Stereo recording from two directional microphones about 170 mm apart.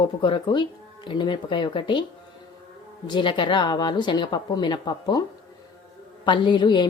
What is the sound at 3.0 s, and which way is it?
Speech, 25° left (ahead or behind).